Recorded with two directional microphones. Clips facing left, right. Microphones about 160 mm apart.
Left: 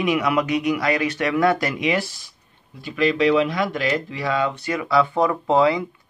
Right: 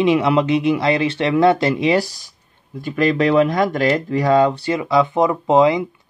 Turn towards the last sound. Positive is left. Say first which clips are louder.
# right 4 dB
turn(degrees=-20)  # may be behind; listen again after turning